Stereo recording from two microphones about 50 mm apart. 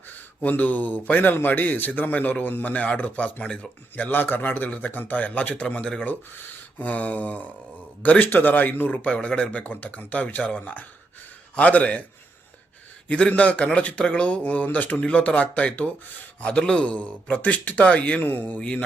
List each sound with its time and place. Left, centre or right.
0.1 s a man's voice: left
4.1 s a man's voice: left
6.1 s a man's voice: left
8.2 s a man's voice: left
9.0 s speech: left
13.1 s a man's voice: left